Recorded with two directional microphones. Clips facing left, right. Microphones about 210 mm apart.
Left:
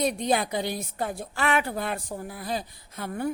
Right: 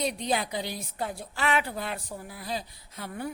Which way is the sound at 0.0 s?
50° left (ahead or behind).